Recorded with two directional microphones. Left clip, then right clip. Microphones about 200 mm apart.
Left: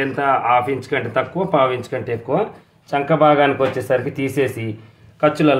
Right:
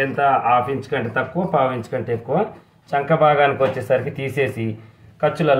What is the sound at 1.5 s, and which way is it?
Speech, 35° left (ahead or behind).